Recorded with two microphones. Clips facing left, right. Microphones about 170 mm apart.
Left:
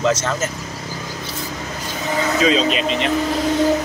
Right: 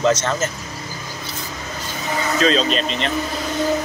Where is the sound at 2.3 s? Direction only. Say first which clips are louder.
Even; 10° left (ahead or behind).